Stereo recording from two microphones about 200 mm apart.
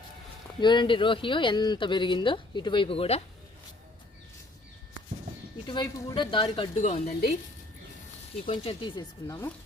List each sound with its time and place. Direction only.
0.6 s speech: 25° left (ahead or behind)
5.6 s speech: 20° left (ahead or behind)
8.4 s speech: 25° left (ahead or behind)